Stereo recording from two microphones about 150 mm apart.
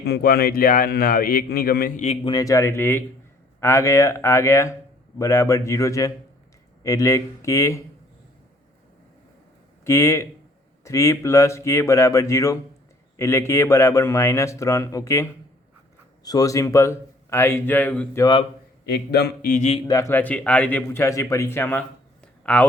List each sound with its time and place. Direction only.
0.0 s speech: 85° left
2.2 s a man's voice: 25° left (ahead or behind)
9.8 s a man's voice: 20° left (ahead or behind)
18.2 s a man's voice: 30° left (ahead or behind)
18.9 s mantra: 90° left; by 19.6 s 75° left (ahead or behind)
19.9 s a man's voice: 20° left (ahead or behind)